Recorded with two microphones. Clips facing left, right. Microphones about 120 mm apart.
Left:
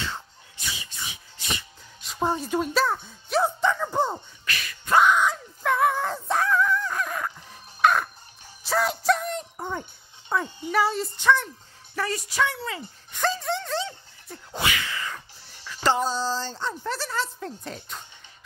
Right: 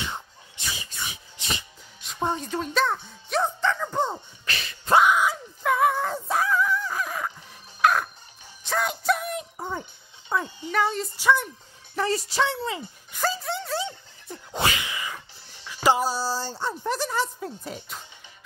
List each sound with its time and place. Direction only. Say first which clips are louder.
1.4 s music: even; 20° right (ahead or behind)
2.0 s speech: left 2 dB; centre (ahead or behind)
3.6 s music: left 1 dB; 10° left (ahead or behind)
4.5 s a sound: right 2 dB; 30° right (ahead or behind)
4.9 s groan: even; 5° right (ahead or behind)
6.1 s dog: left 1 dB; 5° right (ahead or behind)
7.8 s music: left 1 dB; centre (ahead or behind)
10.3 s speech: left 1 dB; centre (ahead or behind); by 12.8 s 25° right (ahead or behind)
13.1 s a sound: left 2 dB; centre (ahead or behind)
13.8 s music: right 2 dB; 20° right (ahead or behind)
14.8 s sneeze: left 1 dB; 15° right (ahead or behind)
15.6 s a woman's voice: right 2 dB; 10° right (ahead or behind)